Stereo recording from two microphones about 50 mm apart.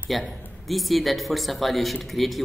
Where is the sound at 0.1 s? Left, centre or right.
Centre.